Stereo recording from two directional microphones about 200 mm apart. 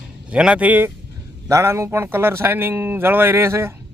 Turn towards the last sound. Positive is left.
turn(degrees=-15)  # may be behind; listen again after turning